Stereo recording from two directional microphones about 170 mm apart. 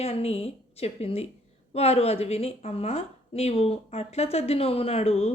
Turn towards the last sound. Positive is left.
turn(degrees=35)  # may be behind; listen again after turning